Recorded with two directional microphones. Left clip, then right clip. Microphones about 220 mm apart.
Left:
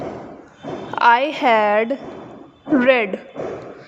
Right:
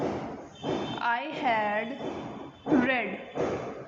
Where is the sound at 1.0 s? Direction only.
50° left (ahead or behind).